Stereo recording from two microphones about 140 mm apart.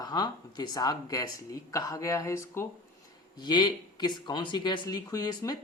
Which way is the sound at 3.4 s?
30° left (ahead or behind).